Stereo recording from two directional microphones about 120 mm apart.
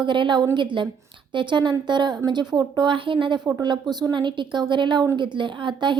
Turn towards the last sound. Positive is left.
turn(degrees=-40)  # may be behind; listen again after turning